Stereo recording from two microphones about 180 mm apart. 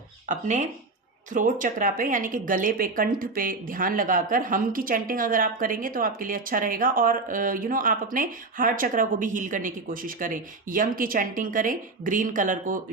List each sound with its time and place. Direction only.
0.3 s speech: 40° right (ahead or behind)